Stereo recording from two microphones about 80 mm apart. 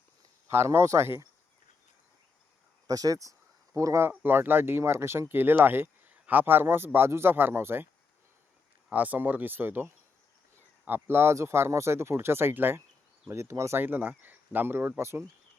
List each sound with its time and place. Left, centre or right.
0.5 s speech: right
2.8 s speech: right
4.0 s speech: right
8.9 s speech: centre
13.2 s speech: right
13.8 s speech: right